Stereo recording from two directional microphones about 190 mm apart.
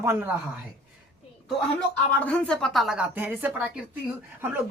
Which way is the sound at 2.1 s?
5° left (ahead or behind).